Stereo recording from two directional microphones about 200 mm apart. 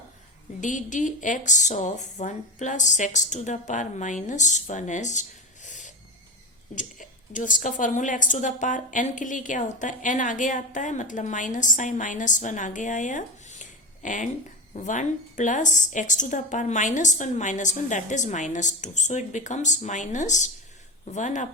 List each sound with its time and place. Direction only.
0.6 s a woman's voice: 40° left (ahead or behind)
5.6 s a sound: 40° left (ahead or behind)
6.7 s a woman's voice: 40° left (ahead or behind)